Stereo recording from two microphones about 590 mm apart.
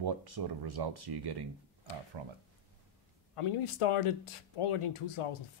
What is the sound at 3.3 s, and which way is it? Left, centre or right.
Speech, left.